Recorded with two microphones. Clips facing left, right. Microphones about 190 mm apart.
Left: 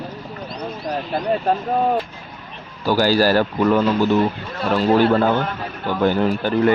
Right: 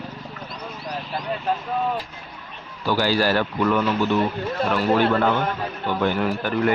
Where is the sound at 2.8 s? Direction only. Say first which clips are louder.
Left 4 dB; 40° left (ahead or behind).